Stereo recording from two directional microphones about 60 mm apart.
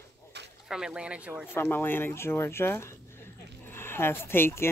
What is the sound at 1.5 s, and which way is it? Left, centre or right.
Speech, left.